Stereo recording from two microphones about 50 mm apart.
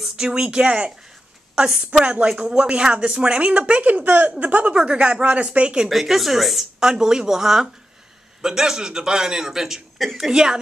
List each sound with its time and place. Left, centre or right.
0.1 s a woman's voice: centre
5.9 s a woman's voice: centre
6.9 s a man's voice: centre